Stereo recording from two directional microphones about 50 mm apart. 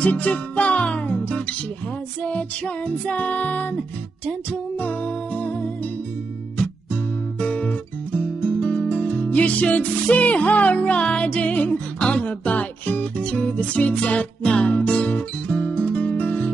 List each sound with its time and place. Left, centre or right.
0.0 s music: left
6.6 s guitar: left
14.7 s music: left